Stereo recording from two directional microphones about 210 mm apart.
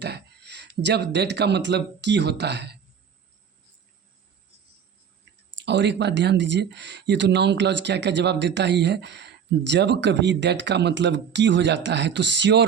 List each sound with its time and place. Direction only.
0.0 s speech: 50° right (ahead or behind)
5.5 s speech: 55° right (ahead or behind)